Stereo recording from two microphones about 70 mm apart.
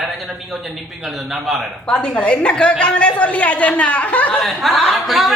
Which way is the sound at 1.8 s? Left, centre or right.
Centre.